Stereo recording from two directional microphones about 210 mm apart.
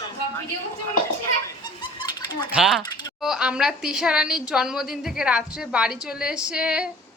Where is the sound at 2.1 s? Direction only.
20° left (ahead or behind).